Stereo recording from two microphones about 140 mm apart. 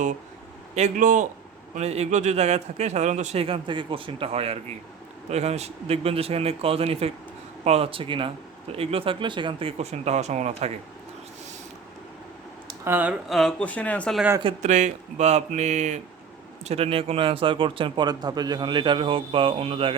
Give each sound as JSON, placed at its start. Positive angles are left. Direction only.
{"t": 0.8, "sound": "speech", "side_deg": -65}
{"t": 1.7, "sound": "a man's voice", "side_deg": -50}
{"t": 12.8, "sound": "speech", "side_deg": -15}
{"t": 13.2, "sound": "speech", "side_deg": 0}
{"t": 14.6, "sound": "a man's voice", "side_deg": -60}